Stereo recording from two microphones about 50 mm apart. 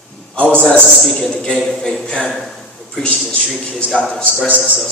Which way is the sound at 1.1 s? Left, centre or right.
Centre.